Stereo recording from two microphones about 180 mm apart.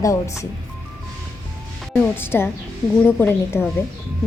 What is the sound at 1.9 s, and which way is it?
A woman's voice, 10° left (ahead or behind).